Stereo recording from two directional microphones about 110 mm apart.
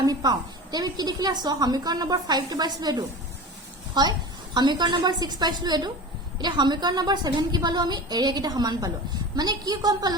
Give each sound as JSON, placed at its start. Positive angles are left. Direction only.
{"t": 0.0, "sound": "a woman's voice", "side_deg": -35}